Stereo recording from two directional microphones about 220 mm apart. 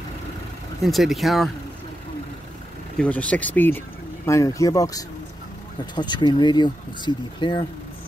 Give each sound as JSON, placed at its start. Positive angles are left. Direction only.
{"t": 0.8, "sound": "speech", "side_deg": 0}
{"t": 3.0, "sound": "speech", "side_deg": 5}